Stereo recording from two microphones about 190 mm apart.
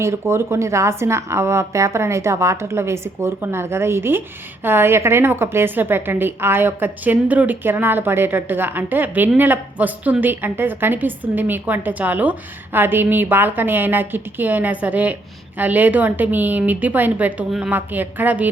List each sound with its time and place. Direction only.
0.0 s a woman's voice: 15° right (ahead or behind)